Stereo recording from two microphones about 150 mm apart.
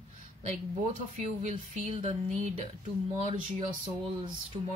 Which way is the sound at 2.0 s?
45° right (ahead or behind).